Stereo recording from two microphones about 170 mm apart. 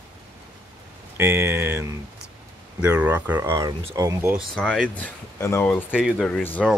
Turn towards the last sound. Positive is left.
turn(degrees=10)  # may be behind; listen again after turning